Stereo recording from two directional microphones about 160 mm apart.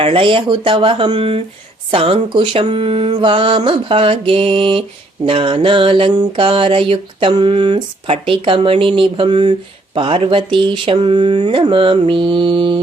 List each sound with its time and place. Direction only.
0.0 s mantra: 35° right (ahead or behind)